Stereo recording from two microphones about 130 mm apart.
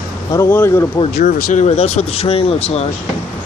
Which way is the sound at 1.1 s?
80° left.